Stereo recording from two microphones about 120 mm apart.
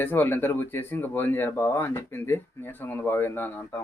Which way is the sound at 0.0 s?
15° left (ahead or behind).